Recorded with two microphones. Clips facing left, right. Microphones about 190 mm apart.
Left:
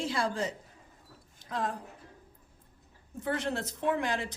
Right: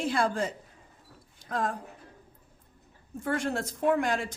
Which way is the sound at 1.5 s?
50° right (ahead or behind).